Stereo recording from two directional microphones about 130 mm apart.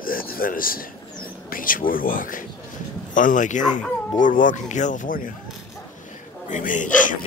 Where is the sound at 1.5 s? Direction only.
90° left; by 3.6 s 75° left (ahead or behind).